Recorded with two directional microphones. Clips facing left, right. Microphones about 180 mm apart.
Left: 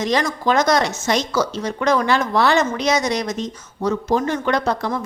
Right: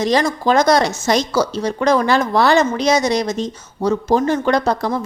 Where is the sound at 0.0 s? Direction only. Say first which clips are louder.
Right 3 dB; 35° right (ahead or behind).